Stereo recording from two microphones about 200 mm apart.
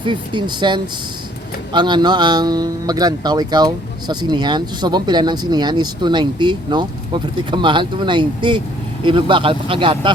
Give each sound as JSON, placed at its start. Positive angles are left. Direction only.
{"t": 0.0, "sound": "a man's voice", "side_deg": -25}